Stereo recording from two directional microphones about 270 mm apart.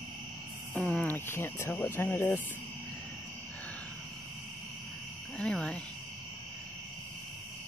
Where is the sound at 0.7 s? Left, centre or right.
Centre.